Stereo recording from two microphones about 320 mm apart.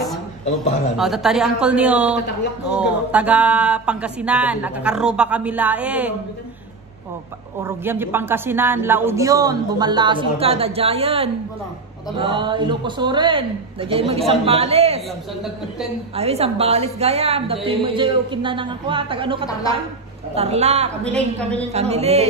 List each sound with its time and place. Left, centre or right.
0.9 s speech: centre
7.6 s speech: centre
16.2 s a woman's voice: centre
21.0 s speech: centre
21.7 s a woman's voice: centre